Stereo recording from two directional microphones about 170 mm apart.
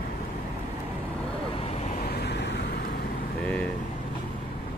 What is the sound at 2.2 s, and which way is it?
Vehicle, 80° left.